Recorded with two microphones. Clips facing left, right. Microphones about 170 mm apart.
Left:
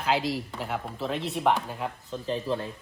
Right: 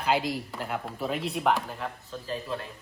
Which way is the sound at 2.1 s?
25° left (ahead or behind).